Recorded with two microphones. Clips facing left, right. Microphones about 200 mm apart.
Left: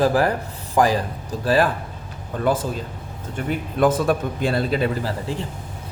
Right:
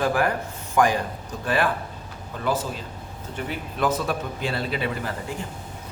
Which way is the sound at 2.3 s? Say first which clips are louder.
Left 5 dB; 50° left (ahead or behind).